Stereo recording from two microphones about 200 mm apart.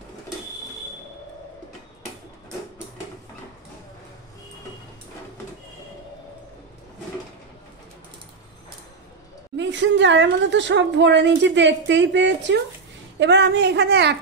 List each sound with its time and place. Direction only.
9.6 s a woman's voice: 65° right (ahead or behind)